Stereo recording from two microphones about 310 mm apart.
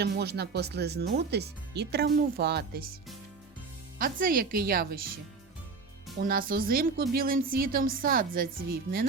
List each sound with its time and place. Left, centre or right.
0.0 s speech: right
3.9 s a woman's voice: right
6.1 s a woman's voice: right